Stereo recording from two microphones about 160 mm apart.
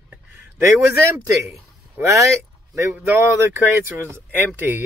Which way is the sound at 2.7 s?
15° right (ahead or behind).